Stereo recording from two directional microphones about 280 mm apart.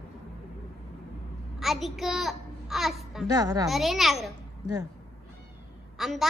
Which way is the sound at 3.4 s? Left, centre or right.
Centre.